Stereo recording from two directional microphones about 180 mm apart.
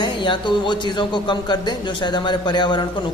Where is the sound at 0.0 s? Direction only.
25° left (ahead or behind).